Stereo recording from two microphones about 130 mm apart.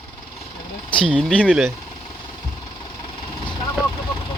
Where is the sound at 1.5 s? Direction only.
10° right (ahead or behind).